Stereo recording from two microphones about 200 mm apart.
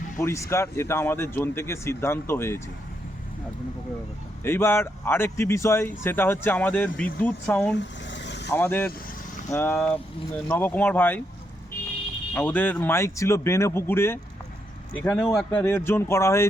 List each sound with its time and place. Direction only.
0.2 s speech: 15° left (ahead or behind)
4.4 s speech: 10° left (ahead or behind)
7.8 s vehicle: 60° left (ahead or behind)
8.4 s speech: 10° left (ahead or behind)
12.3 s speech: 10° left (ahead or behind)